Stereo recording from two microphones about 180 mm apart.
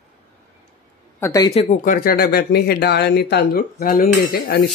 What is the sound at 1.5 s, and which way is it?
Speech, 35° left (ahead or behind).